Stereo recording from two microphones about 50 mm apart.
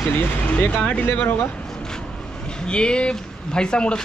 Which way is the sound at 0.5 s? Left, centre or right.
Left.